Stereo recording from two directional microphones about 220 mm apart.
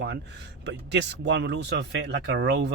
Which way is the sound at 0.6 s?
50° right (ahead or behind).